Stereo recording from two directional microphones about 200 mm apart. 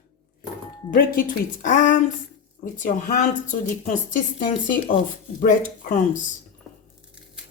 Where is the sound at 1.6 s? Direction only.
40° left (ahead or behind).